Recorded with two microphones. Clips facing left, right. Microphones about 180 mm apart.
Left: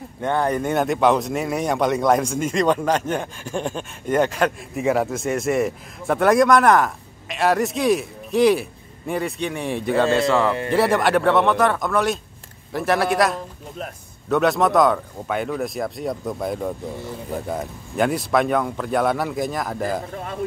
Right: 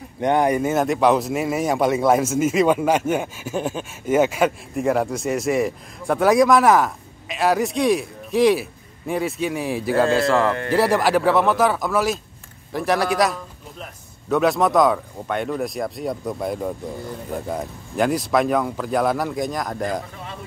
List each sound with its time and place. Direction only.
0.2 s a man's voice: 15° right (ahead or behind); by 20.1 s 5° left (ahead or behind)